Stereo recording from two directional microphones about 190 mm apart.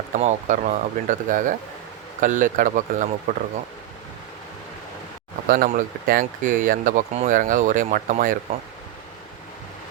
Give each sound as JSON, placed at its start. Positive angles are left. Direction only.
{"t": 0.1, "sound": "speech", "side_deg": -40}
{"t": 5.5, "sound": "speech", "side_deg": -50}